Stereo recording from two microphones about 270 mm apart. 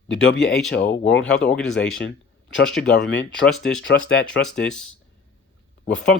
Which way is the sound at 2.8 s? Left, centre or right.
Left.